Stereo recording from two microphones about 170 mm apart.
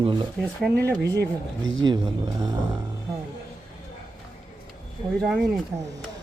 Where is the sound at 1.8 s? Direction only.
25° right (ahead or behind).